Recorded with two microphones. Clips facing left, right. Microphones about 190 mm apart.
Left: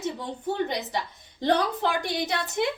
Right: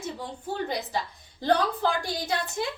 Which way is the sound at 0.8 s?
20° left (ahead or behind).